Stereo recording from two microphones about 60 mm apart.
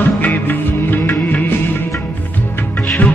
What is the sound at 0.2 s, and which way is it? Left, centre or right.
Music, left.